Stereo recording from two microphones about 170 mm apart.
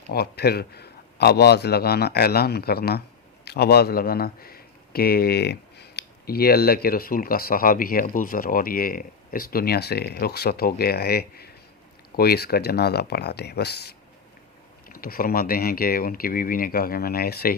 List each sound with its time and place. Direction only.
0.1 s a man's voice: 65° left (ahead or behind)
14.8 s speech: 55° left (ahead or behind)